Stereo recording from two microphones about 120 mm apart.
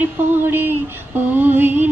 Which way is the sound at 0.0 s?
15° right (ahead or behind).